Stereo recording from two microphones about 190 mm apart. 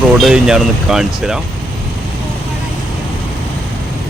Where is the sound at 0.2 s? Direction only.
5° right (ahead or behind).